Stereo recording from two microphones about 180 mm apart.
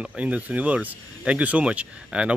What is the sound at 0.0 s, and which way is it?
Speech, 5° right (ahead or behind).